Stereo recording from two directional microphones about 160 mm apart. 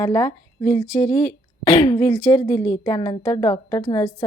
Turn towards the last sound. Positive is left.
turn(degrees=30)  # may be behind; listen again after turning